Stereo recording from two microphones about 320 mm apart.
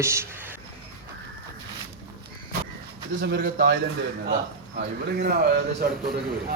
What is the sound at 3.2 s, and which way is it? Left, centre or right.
Speech, right.